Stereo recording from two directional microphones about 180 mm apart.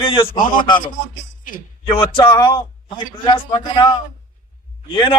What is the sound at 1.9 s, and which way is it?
A man's voice, 30° left (ahead or behind).